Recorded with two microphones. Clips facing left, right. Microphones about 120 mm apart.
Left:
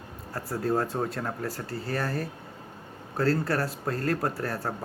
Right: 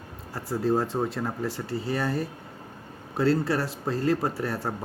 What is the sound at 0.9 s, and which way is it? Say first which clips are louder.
Speech: right 2 dB; 10° right (ahead or behind).